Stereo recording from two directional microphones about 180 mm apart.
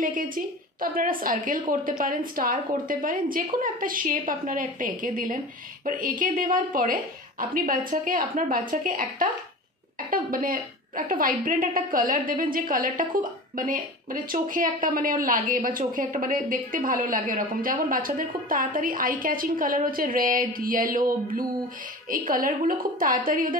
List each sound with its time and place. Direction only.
0.0 s a woman's voice: 50° right (ahead or behind)